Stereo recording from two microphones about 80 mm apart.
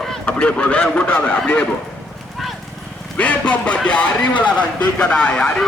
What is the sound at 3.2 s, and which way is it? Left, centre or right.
Speech, centre.